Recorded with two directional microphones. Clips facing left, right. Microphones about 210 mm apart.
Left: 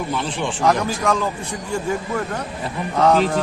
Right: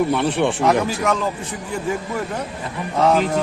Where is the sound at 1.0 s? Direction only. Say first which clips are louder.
Even; 5° right (ahead or behind).